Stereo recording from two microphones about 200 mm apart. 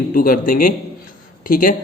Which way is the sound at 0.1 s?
45° left (ahead or behind).